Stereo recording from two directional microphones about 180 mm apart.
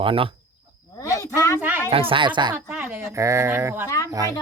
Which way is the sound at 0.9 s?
20° left (ahead or behind).